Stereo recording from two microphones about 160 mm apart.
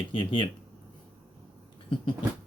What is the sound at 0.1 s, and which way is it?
Speech, 35° left (ahead or behind).